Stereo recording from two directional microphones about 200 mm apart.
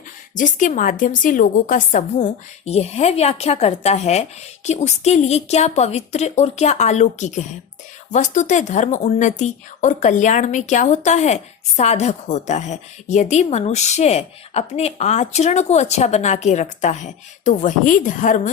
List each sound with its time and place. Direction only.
0.3 s a woman's voice: 40° left (ahead or behind)